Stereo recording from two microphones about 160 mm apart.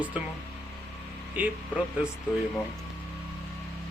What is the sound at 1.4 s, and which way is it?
Speech, 10° right (ahead or behind).